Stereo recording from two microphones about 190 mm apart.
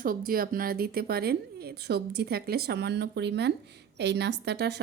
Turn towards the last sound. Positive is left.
turn(degrees=-60)  # may be behind; listen again after turning